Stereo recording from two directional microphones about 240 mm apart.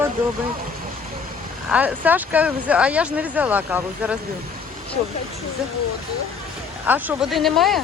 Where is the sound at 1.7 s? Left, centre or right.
Centre.